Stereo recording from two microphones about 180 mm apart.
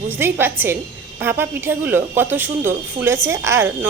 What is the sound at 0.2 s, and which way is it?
Speech, 10° right (ahead or behind).